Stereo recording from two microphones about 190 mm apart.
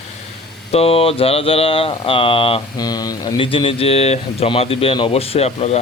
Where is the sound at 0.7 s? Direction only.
30° left (ahead or behind).